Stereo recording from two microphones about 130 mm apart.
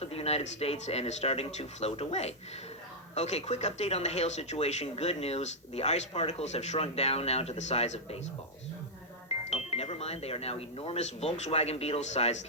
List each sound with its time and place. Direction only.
0.0 s speech: 50° left (ahead or behind)
9.5 s speech: 50° left (ahead or behind)